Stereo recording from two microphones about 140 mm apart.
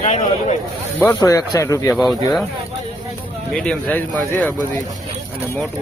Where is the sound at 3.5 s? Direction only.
10° left (ahead or behind).